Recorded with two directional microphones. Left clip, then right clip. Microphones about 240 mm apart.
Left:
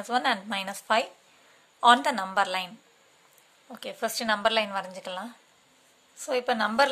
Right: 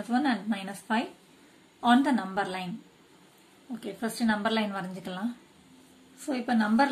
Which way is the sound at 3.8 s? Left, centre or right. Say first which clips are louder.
Left 3 dB; left.